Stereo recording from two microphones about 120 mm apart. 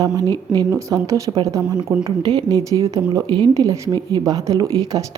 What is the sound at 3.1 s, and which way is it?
Speech, 40° right (ahead or behind).